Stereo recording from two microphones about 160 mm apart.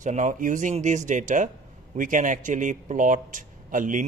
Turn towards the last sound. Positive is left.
turn(degrees=-55)  # may be behind; listen again after turning